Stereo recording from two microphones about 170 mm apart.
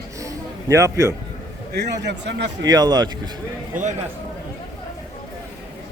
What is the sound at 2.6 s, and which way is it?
Speech, 20° right (ahead or behind).